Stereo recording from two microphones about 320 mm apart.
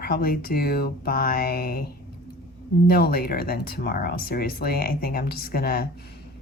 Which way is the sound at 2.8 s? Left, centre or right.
Left.